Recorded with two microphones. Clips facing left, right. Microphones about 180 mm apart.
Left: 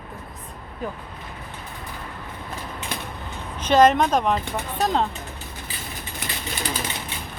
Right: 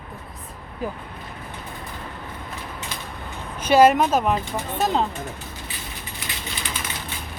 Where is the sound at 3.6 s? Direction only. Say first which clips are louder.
Right 1 dB; 10° right (ahead or behind).